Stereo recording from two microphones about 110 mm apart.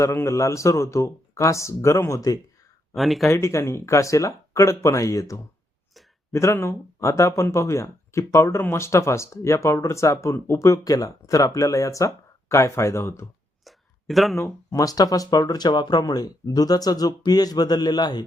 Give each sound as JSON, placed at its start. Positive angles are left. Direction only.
{"t": 0.0, "sound": "speech", "side_deg": 25}
{"t": 2.9, "sound": "speech", "side_deg": 0}
{"t": 3.2, "sound": "speech", "side_deg": 25}
{"t": 13.7, "sound": "a sound", "side_deg": 0}
{"t": 14.3, "sound": "speech", "side_deg": 25}